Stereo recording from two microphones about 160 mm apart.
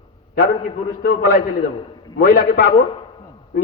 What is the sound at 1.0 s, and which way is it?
A man's voice, 60° left (ahead or behind).